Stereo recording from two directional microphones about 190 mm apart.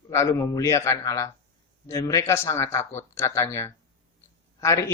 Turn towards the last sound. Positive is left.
turn(degrees=15)  # may be behind; listen again after turning